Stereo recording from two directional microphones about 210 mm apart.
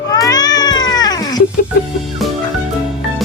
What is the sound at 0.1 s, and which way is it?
Cat, 20° left (ahead or behind).